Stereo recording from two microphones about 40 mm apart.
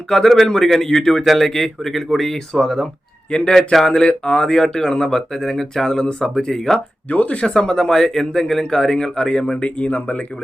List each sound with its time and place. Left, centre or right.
0.1 s speech: centre
3.2 s a man's voice: left
3.5 s speech: centre
7.1 s speech: left
7.5 s speech: centre
9.6 s speech: left